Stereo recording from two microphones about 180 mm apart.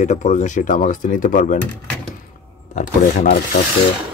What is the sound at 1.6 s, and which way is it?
Speech, 5° left (ahead or behind).